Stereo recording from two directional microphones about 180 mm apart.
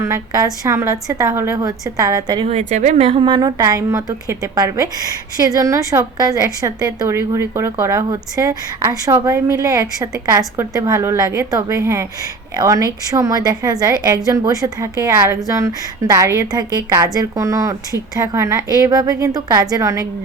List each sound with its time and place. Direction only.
0.0 s a woman's voice: 15° right (ahead or behind)
2.5 s a woman's voice: 40° right (ahead or behind); by 20.1 s 15° right (ahead or behind)